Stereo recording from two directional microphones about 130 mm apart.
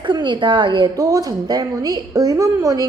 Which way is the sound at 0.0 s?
35° right (ahead or behind).